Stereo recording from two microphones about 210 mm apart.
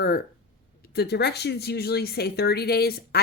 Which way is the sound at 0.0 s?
45° left (ahead or behind).